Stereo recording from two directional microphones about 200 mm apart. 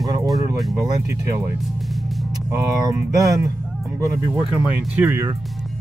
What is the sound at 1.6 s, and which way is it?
Music, centre (ahead or behind).